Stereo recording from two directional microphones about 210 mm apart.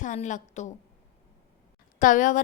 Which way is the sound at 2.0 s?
40° left (ahead or behind).